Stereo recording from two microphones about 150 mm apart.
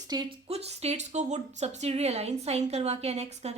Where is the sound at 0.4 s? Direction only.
45° right (ahead or behind).